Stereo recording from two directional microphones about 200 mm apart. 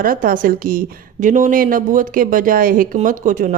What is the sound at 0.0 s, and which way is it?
A woman's voice, 45° right (ahead or behind).